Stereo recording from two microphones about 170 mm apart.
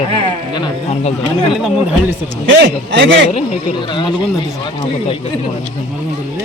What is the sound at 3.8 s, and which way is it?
Speech, 30° left (ahead or behind).